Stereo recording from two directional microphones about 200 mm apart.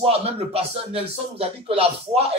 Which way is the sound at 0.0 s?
30° right (ahead or behind).